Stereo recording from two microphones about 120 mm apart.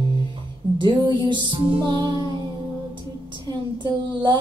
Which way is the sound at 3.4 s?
40° right (ahead or behind).